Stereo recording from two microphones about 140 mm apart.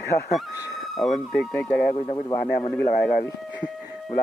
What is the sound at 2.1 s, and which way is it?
Speech, 30° left (ahead or behind).